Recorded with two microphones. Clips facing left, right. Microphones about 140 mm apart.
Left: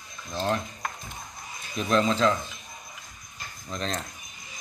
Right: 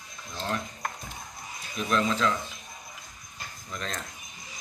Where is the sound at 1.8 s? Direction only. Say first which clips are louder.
Left 3 dB; 30° left (ahead or behind).